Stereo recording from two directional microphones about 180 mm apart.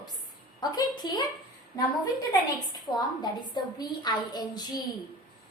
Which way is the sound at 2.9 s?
25° left (ahead or behind).